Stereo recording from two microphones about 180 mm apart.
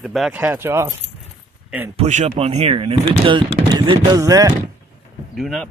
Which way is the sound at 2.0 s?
40° right (ahead or behind).